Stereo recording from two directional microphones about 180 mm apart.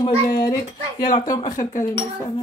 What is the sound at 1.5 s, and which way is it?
Speech, 45° left (ahead or behind).